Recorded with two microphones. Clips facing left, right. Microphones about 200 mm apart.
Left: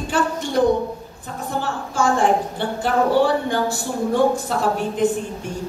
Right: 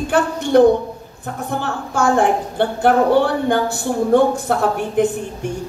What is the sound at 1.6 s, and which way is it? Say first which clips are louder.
A man's voice: right 2 dB; 60° right (ahead or behind).